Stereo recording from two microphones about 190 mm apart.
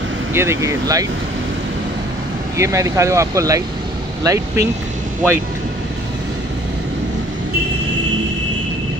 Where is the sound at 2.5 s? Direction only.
15° right (ahead or behind).